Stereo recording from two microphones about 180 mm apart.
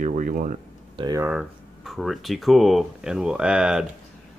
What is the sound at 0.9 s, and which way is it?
Speech, 20° right (ahead or behind).